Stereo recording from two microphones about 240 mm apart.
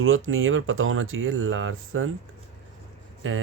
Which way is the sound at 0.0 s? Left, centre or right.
Right.